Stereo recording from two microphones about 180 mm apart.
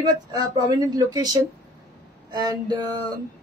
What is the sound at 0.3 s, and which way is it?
Speech, 20° right (ahead or behind).